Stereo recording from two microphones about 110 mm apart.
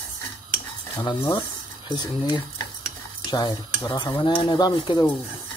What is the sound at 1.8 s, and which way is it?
Speech, 45° left (ahead or behind).